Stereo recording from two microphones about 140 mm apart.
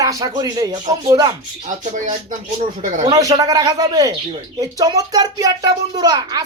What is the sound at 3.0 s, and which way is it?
Speech, 25° right (ahead or behind).